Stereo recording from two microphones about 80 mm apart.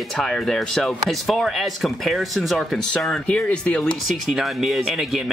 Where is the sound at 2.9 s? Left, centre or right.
Centre.